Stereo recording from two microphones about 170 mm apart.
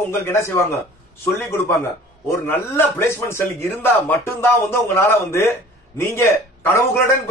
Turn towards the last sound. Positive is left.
turn(degrees=15)  # may be behind; listen again after turning